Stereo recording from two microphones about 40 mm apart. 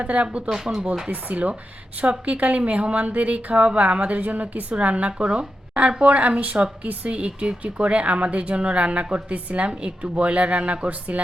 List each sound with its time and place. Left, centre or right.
0.0 s speech: right
0.5 s speech: centre
1.1 s speech: right
4.2 s a woman's voice: right
4.7 s speech: right